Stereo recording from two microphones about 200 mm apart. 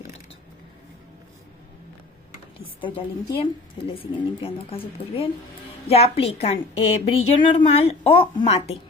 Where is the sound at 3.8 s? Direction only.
30° left (ahead or behind).